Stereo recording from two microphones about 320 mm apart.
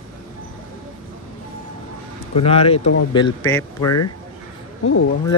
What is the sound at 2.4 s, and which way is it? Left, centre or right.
Speech, centre.